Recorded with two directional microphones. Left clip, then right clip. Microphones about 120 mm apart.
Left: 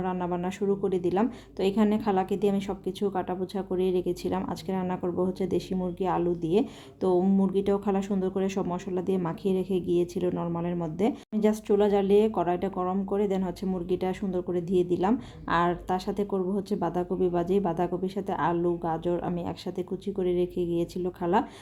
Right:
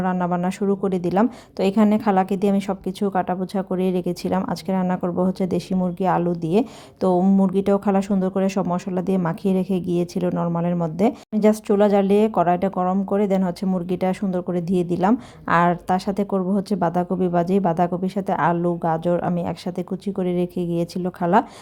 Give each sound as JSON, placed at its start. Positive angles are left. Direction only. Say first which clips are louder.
{"t": 0.0, "sound": "a woman's voice", "louder": "right 7 dB", "side_deg": -40}